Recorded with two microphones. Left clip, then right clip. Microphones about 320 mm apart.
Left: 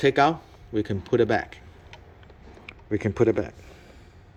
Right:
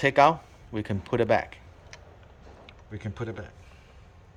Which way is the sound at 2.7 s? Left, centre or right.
Centre.